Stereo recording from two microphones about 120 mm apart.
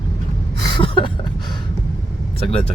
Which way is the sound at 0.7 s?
45° left (ahead or behind).